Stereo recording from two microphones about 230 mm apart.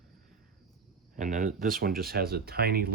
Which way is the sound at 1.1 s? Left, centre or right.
Right.